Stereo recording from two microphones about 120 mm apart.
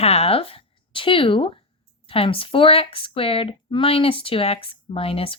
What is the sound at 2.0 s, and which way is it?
Speech, 50° left (ahead or behind).